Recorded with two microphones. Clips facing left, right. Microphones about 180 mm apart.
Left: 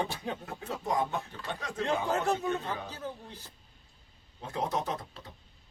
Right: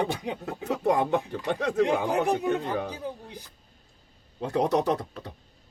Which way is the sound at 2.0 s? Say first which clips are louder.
Right 5 dB; 15° right (ahead or behind).